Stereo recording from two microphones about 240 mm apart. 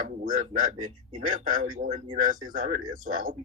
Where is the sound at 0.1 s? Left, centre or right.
Right.